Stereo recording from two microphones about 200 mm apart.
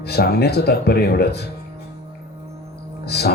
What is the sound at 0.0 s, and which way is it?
Music, 55° left (ahead or behind).